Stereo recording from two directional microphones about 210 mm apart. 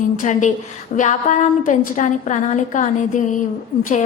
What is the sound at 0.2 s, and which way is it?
A woman's voice, 35° left (ahead or behind).